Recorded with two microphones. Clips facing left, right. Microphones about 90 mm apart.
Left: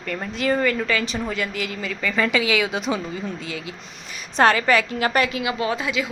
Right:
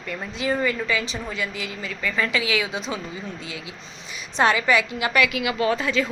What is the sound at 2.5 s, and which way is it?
Speech, 65° left (ahead or behind).